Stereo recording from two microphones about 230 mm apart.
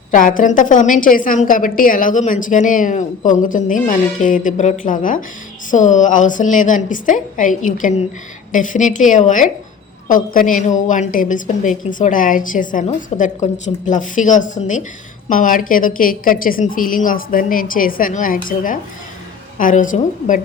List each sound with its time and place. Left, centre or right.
0.1 s a woman's voice: left